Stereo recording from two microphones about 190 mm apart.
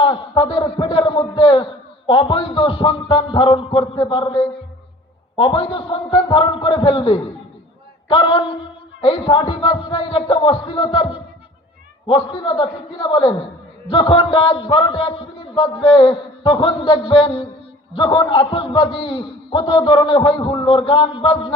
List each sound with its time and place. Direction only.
0.0 s a man's voice: 25° left (ahead or behind)